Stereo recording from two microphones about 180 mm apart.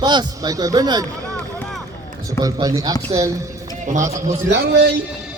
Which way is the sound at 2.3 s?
20° right (ahead or behind).